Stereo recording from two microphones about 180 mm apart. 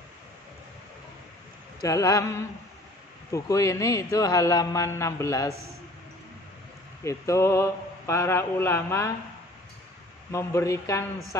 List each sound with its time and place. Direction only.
1.8 s mantra: 20° left (ahead or behind)
3.3 s a man's voice: 15° left (ahead or behind)
7.1 s a man's voice: 15° left (ahead or behind)
10.3 s a man's voice: 15° left (ahead or behind)